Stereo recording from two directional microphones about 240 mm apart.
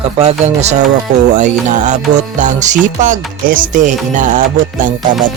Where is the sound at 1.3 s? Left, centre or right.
Right.